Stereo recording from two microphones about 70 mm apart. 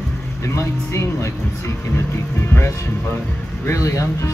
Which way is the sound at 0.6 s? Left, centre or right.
Left.